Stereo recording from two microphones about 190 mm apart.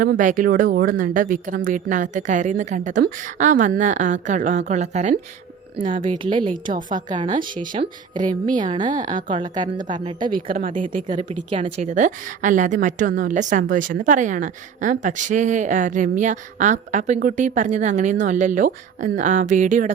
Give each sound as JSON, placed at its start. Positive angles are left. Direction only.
{"t": 0.0, "sound": "a woman's voice", "side_deg": -45}
{"t": 5.7, "sound": "a woman's voice", "side_deg": -25}
{"t": 6.5, "sound": "speech", "side_deg": -45}
{"t": 7.7, "sound": "a woman's voice", "side_deg": -25}
{"t": 8.3, "sound": "a woman's voice", "side_deg": -40}
{"t": 9.3, "sound": "a woman's voice", "side_deg": -25}
{"t": 10.2, "sound": "a woman's voice", "side_deg": -50}